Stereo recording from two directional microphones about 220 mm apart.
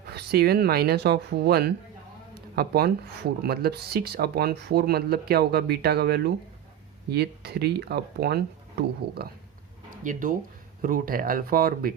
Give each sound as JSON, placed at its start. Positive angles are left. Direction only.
{"t": 0.1, "sound": "speech", "side_deg": -45}